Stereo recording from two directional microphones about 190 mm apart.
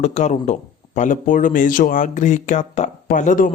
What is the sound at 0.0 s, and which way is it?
Speech, 40° left (ahead or behind).